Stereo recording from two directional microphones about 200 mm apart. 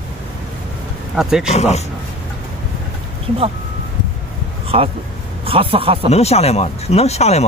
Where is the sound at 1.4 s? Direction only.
35° left (ahead or behind).